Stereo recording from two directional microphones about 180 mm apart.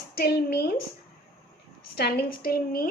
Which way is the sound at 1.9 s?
60° left (ahead or behind).